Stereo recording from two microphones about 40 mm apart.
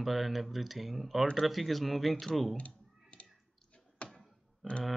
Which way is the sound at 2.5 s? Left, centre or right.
Left.